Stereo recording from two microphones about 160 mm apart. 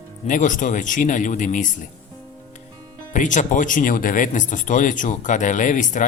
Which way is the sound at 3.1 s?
50° left (ahead or behind).